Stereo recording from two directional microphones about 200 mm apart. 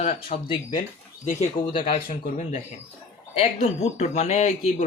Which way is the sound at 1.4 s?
25° left (ahead or behind).